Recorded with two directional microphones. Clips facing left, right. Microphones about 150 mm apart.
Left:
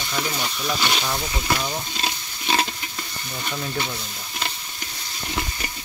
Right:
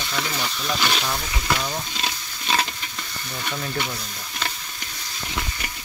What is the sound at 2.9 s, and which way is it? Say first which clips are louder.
Stir: even; 10° left (ahead or behind).